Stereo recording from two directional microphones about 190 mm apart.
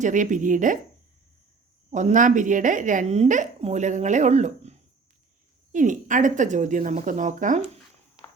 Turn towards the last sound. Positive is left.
turn(degrees=-40)  # may be behind; listen again after turning